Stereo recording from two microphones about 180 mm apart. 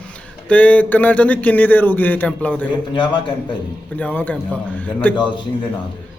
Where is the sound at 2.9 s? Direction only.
25° left (ahead or behind).